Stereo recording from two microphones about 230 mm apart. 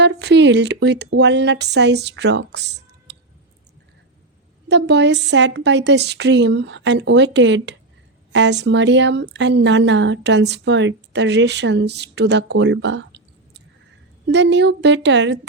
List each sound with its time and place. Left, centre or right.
0.0 s speech: right
4.7 s speech: right